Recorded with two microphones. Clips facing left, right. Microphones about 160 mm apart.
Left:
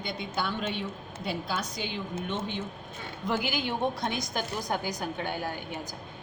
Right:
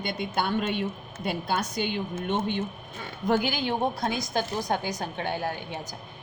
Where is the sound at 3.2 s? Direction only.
35° right (ahead or behind).